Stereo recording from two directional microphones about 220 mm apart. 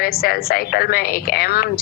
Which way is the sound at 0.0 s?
45° left (ahead or behind).